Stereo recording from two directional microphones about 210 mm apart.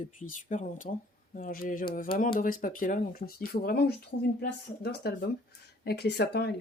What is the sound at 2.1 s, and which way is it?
Female singing, 40° left (ahead or behind).